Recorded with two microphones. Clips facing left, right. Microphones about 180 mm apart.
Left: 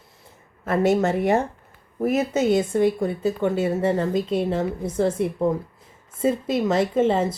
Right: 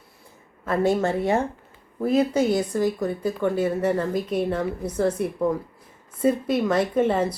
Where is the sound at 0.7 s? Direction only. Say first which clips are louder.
Left 2 dB; 20° left (ahead or behind).